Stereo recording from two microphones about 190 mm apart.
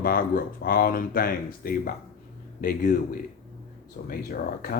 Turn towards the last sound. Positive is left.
turn(degrees=50)  # may be behind; listen again after turning